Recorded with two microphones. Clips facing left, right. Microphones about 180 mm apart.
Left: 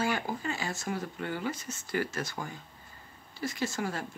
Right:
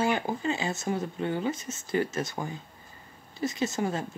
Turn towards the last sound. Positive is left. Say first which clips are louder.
# right 4 dB
turn(degrees=-20)  # may be behind; listen again after turning